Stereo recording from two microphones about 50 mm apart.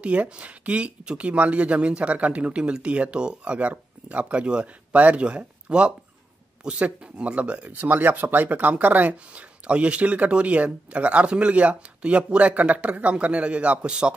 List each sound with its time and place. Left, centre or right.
0.0 s speech: right
3.5 s speech: right